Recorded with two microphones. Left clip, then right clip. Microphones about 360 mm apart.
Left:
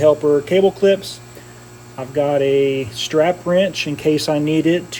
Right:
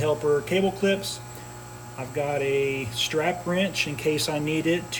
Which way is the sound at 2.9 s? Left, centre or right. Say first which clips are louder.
Left 9 dB; centre.